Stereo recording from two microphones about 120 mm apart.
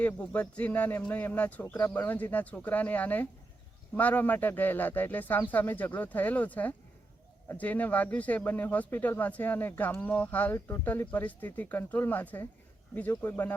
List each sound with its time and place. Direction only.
0.0 s speech: 10° left (ahead or behind)